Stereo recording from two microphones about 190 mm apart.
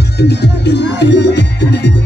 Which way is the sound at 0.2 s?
60° left (ahead or behind).